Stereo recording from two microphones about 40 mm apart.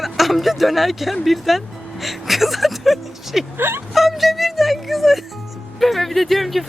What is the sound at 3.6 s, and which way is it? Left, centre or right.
Speech, right.